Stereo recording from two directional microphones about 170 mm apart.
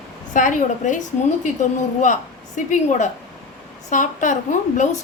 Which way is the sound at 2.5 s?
45° left (ahead or behind).